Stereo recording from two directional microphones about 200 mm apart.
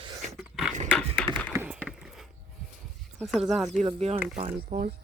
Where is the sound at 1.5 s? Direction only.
10° right (ahead or behind).